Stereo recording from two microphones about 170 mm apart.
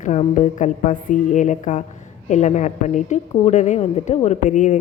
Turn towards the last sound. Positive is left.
turn(degrees=45)  # may be behind; listen again after turning